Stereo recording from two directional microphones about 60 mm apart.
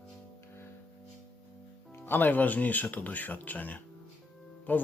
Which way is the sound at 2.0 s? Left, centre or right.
Left.